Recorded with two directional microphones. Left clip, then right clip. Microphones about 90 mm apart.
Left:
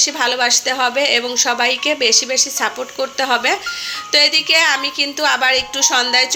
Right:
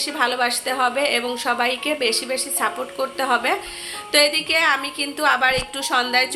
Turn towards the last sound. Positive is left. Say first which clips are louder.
# left 5 dB
turn(degrees=20)  # may be behind; listen again after turning